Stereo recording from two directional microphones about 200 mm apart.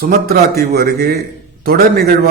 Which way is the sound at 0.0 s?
50° right (ahead or behind).